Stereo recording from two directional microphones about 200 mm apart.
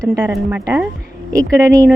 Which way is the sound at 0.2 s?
10° right (ahead or behind).